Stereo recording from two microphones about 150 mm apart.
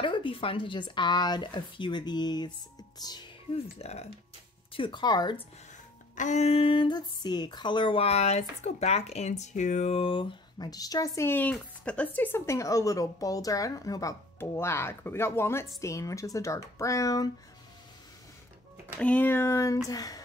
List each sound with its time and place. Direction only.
0.0 s speech: 35° left (ahead or behind)
3.5 s speech: 45° left (ahead or behind)
4.7 s speech: 30° left (ahead or behind)
6.1 s speech: 55° left (ahead or behind); by 17.3 s 25° left (ahead or behind)
18.9 s speech: 10° left (ahead or behind)